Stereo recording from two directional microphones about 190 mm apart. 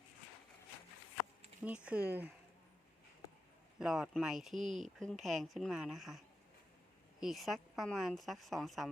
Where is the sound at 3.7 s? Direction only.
Centre (ahead or behind).